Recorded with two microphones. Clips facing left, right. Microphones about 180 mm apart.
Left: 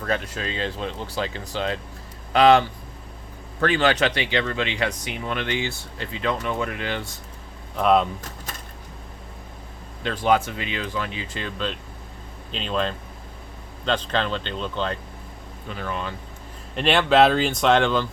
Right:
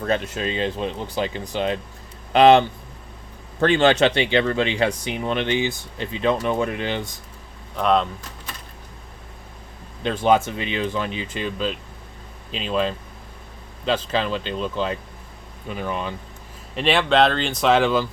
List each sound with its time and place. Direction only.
0.0 s speech: 25° right (ahead or behind)
6.3 s speech: 30° right (ahead or behind)
7.8 s speech: 5° left (ahead or behind)
10.0 s speech: 20° right (ahead or behind)
16.7 s speech: centre (ahead or behind)